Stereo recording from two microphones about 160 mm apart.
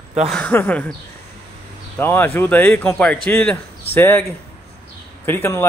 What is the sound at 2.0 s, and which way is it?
Speech, 15° left (ahead or behind).